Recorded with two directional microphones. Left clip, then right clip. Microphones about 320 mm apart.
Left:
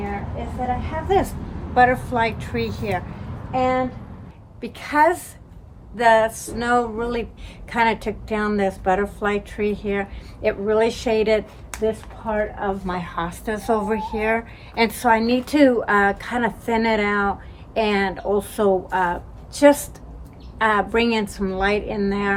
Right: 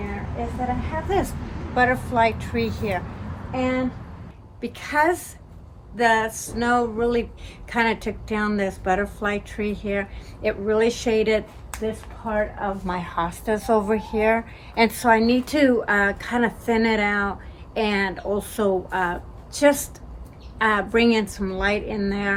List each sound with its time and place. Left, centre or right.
1.1 s a woman's voice: centre